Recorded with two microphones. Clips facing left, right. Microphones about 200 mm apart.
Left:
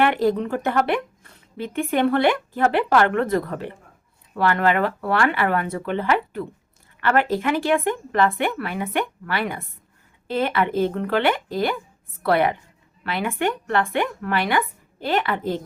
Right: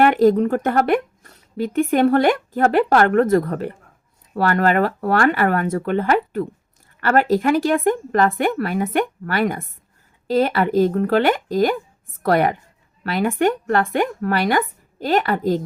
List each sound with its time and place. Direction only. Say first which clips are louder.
0.0 s speech: right 5 dB; 45° right (ahead or behind)